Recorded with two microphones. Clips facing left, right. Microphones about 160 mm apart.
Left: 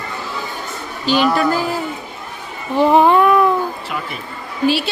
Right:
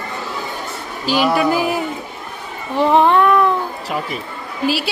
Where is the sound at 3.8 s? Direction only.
40° right (ahead or behind).